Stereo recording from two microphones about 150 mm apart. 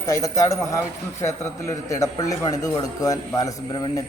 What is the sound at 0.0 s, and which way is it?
A man's voice, 20° left (ahead or behind).